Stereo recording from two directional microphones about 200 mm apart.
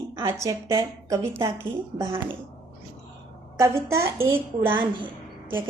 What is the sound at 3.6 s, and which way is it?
A woman's voice, 15° right (ahead or behind).